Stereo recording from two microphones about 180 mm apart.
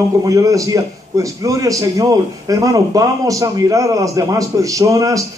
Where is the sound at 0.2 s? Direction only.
20° right (ahead or behind).